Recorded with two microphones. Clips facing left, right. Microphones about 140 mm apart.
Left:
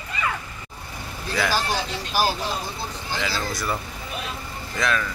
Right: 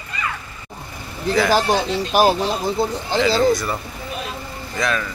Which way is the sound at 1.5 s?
60° right (ahead or behind).